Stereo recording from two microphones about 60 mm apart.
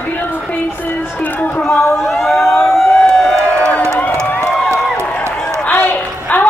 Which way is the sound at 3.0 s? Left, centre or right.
Centre.